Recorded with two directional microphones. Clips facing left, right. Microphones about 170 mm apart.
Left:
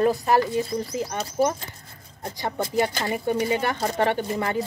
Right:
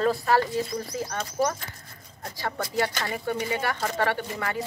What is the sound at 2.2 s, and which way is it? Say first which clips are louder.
Speech: left 3 dB; 20° left (ahead or behind).